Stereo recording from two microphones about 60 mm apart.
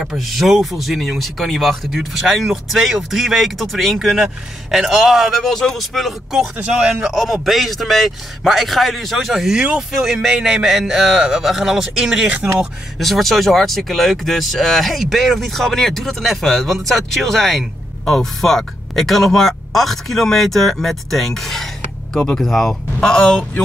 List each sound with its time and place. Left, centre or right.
0.0 s speech: centre
5.4 s speech: centre
6.5 s speech: right
7.2 s speech: centre
9.6 s speech: centre
13.0 s speech: centre